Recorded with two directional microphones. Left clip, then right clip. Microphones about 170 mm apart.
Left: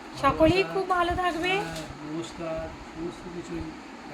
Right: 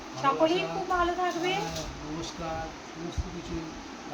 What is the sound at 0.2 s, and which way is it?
Speech, 80° left.